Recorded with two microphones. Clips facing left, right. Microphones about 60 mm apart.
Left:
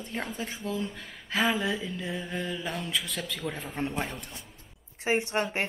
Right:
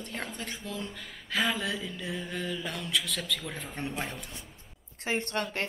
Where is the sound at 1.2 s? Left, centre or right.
Centre.